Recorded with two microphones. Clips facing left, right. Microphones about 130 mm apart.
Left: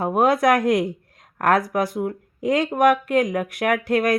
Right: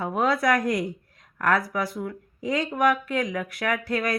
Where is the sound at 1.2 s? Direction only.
50° left (ahead or behind).